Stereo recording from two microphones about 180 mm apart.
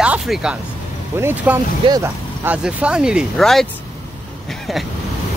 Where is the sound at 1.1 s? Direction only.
10° right (ahead or behind).